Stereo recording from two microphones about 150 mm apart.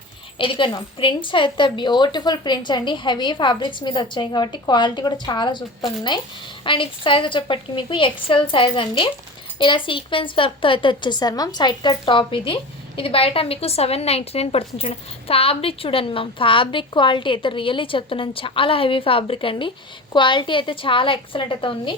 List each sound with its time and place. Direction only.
0.3 s a woman's voice: 35° left (ahead or behind)
6.7 s a woman's voice: 35° left (ahead or behind)